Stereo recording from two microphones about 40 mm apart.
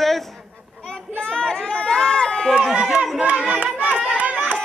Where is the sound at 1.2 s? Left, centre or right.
Left.